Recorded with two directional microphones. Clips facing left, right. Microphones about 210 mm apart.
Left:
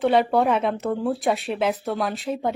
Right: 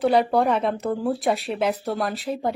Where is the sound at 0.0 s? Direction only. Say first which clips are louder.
Even; centre (ahead or behind).